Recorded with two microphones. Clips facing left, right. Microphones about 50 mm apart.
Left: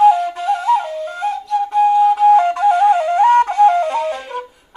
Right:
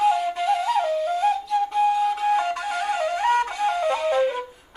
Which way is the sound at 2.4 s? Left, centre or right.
Left.